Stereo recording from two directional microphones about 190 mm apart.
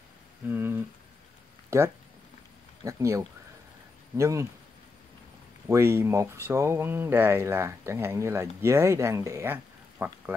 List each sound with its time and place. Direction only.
0.5 s a sound: 10° right (ahead or behind)
1.7 s speech: 15° right (ahead or behind)
5.7 s speech: 15° right (ahead or behind)